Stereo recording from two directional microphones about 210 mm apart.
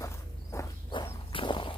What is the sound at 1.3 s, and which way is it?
Horse, 25° left (ahead or behind).